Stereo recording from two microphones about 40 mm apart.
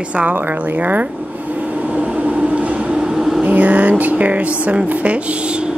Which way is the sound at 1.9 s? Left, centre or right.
Right.